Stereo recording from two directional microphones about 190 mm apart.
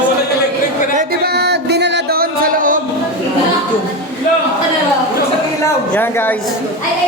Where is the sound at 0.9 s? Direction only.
55° right (ahead or behind).